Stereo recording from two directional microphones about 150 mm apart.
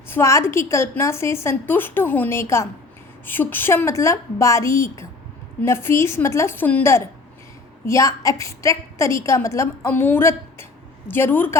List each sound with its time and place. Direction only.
0.1 s a woman's voice: 20° left (ahead or behind)